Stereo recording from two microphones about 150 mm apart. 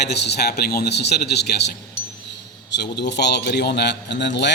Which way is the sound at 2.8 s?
90° left.